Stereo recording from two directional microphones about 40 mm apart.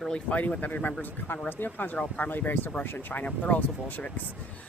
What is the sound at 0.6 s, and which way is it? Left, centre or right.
Speech, left.